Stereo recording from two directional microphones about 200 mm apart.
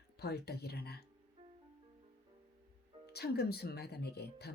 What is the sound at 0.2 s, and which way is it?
Speech, 55° left (ahead or behind).